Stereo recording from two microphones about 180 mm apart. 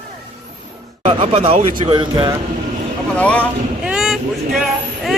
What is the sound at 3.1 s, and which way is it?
Speech, 5° left (ahead or behind).